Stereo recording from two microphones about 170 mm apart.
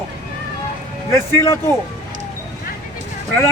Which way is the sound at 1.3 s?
15° left (ahead or behind).